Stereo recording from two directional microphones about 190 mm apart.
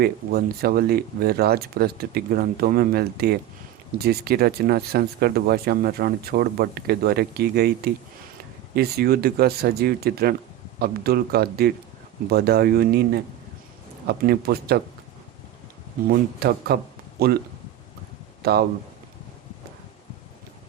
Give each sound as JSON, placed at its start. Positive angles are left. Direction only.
{"t": 0.0, "sound": "speech", "side_deg": -50}
{"t": 16.0, "sound": "speech", "side_deg": -55}
{"t": 18.4, "sound": "speech", "side_deg": -55}